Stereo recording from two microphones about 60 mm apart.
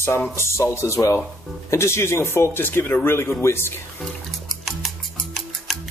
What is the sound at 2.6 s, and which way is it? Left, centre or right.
Speech, left.